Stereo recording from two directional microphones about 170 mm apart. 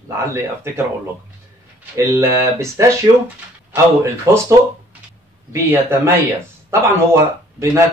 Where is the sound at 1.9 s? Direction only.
15° right (ahead or behind).